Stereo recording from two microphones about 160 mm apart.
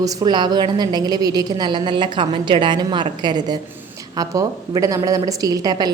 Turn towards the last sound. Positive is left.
turn(degrees=-25)  # may be behind; listen again after turning